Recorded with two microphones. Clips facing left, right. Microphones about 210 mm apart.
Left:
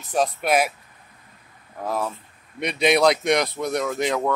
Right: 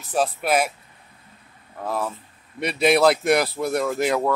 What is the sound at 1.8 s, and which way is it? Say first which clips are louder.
Speech: even; centre (ahead or behind).